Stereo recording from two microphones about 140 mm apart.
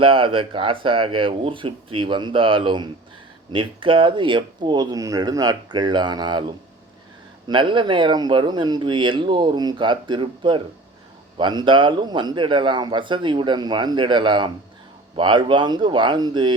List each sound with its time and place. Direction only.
0.0 s speech: 40° right (ahead or behind)